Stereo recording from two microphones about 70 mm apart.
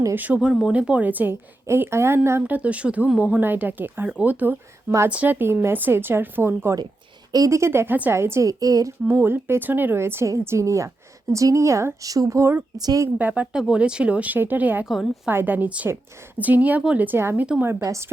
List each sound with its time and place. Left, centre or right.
0.1 s speech: right
1.6 s speech: right
2.5 s speech: centre; by 6.7 s right
7.3 s a woman's voice: right
8.4 s a woman's voice: right
9.0 s a woman's voice: right
12.0 s a woman's voice: right
13.1 s speech: right
14.8 s a woman's voice: centre
15.3 s speech: right